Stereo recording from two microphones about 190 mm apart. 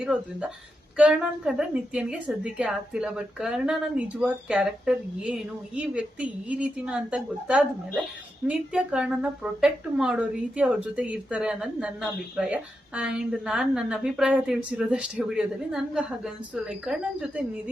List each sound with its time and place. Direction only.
0.0 s speech: 5° right (ahead or behind)